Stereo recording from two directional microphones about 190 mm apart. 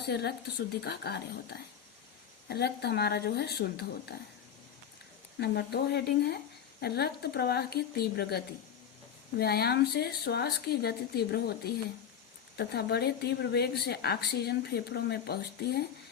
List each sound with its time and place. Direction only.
0.0 s a woman's voice: 60° left (ahead or behind)
5.4 s a woman's voice: 60° left (ahead or behind)